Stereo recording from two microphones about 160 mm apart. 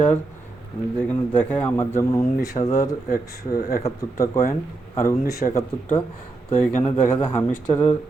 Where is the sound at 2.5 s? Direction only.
40° left (ahead or behind).